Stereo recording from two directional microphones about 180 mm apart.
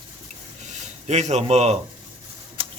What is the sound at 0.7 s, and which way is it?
Speech, 40° right (ahead or behind).